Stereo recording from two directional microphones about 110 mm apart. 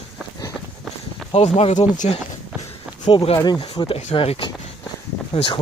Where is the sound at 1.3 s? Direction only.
70° left (ahead or behind).